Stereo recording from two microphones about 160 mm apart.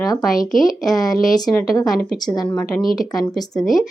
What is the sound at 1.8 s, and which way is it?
Speech, centre (ahead or behind).